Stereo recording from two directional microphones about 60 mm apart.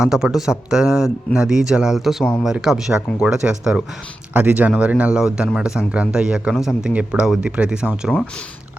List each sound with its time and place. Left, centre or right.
0.0 s speech: centre
4.4 s speech: right; by 6.9 s centre
6.9 s speech: centre